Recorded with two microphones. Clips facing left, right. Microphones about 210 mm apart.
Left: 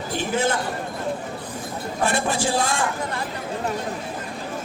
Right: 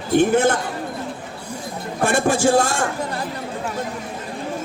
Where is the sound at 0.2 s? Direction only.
55° right (ahead or behind).